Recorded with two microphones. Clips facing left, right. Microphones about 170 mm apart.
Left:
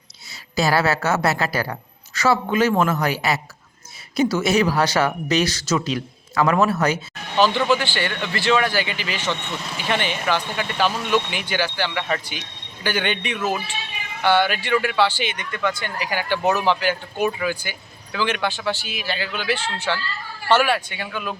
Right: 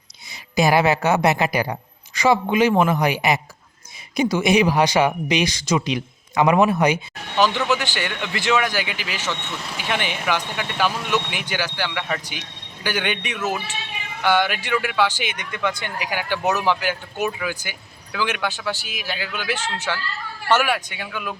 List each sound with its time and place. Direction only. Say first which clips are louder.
0.5 s speech: right 2 dB; 15° right (ahead or behind)